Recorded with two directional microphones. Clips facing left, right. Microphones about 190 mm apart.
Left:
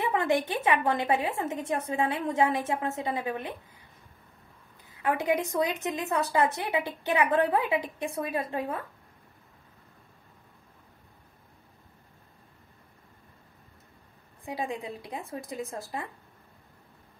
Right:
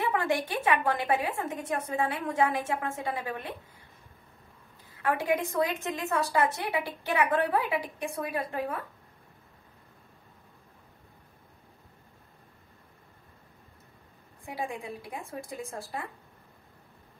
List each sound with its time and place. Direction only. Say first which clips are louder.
0.1 s a woman's voice: left 2 dB; 20° left (ahead or behind)
5.0 s a woman's voice: left 1 dB; 15° left (ahead or behind)
14.4 s a woman's voice: left 2 dB; 20° left (ahead or behind)